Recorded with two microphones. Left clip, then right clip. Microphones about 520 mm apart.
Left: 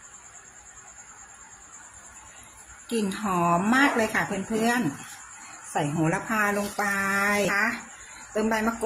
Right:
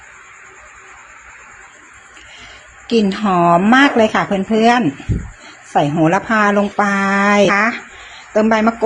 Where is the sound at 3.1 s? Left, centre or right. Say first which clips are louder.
Right 11 dB; left.